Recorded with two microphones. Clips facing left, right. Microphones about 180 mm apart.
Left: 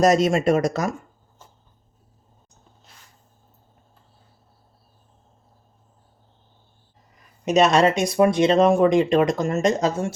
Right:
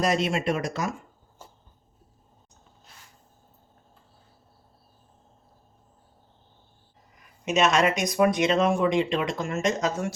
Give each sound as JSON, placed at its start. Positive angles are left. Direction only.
{"t": 0.0, "sound": "speech", "side_deg": 45}
{"t": 7.4, "sound": "speech", "side_deg": 35}